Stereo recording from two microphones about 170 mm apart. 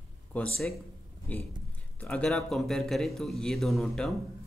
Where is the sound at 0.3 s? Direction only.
5° left (ahead or behind).